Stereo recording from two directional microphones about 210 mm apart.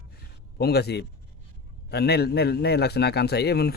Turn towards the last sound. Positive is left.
turn(degrees=50)  # may be behind; listen again after turning